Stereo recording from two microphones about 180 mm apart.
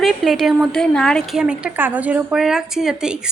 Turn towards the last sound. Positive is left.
turn(degrees=-5)  # may be behind; listen again after turning